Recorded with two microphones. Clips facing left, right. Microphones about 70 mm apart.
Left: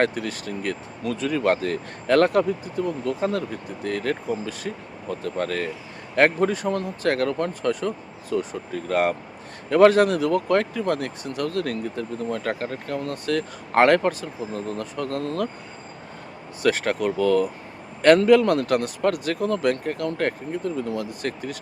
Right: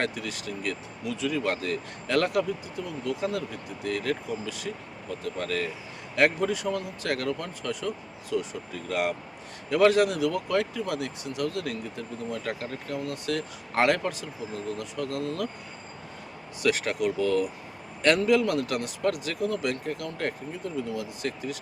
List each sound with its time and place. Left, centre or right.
0.0 s speech: left
16.6 s speech: left